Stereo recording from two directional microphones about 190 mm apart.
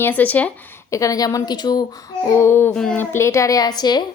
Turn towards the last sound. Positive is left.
turn(degrees=20)  # may be behind; listen again after turning